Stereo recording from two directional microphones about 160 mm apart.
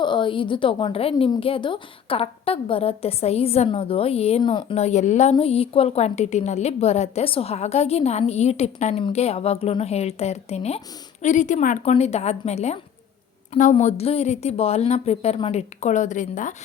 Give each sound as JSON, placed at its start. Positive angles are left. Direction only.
{"t": 0.0, "sound": "a woman's voice", "side_deg": 30}